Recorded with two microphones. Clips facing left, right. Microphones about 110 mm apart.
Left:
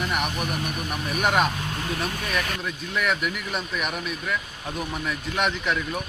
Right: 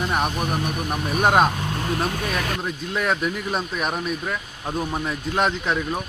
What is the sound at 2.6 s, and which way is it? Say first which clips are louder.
Speech: right 2 dB; 35° right (ahead or behind).